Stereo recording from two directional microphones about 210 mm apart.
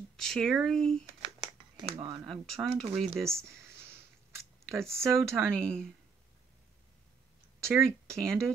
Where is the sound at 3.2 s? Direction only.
15° right (ahead or behind).